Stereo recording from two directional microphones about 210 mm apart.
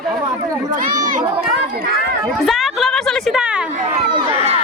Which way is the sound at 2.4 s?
Centre (ahead or behind).